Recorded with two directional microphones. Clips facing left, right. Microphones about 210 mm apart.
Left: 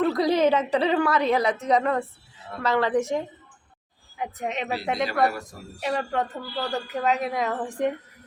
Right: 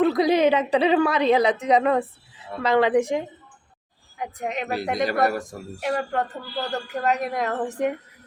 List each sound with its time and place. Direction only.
0.0 s a woman's voice: 15° right (ahead or behind)
4.2 s a woman's voice: centre (ahead or behind)
4.9 s speech: 45° right (ahead or behind)
5.8 s a woman's voice: centre (ahead or behind)